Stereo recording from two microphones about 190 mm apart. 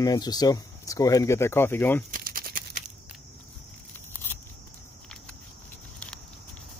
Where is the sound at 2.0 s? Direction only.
45° right (ahead or behind).